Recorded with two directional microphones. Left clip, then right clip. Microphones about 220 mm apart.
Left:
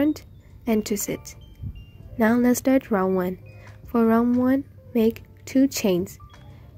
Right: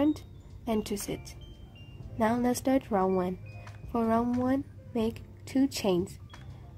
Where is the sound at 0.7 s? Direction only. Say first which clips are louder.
Left 7 dB; 15° left (ahead or behind).